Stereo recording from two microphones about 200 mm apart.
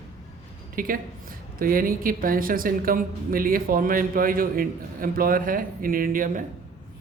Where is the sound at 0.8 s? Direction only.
45° right (ahead or behind).